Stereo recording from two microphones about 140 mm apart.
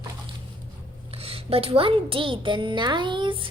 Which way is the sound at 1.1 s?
45° right (ahead or behind).